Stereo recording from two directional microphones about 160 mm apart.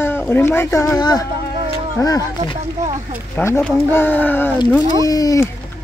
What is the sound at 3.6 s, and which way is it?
Speech, 5° left (ahead or behind).